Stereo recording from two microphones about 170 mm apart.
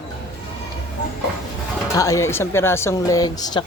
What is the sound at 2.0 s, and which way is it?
Speech, 20° left (ahead or behind).